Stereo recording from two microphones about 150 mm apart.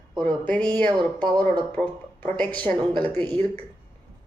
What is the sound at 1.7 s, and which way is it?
Speech, 10° left (ahead or behind).